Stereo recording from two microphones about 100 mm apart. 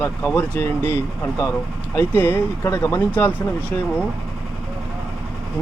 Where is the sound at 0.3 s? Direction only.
20° left (ahead or behind).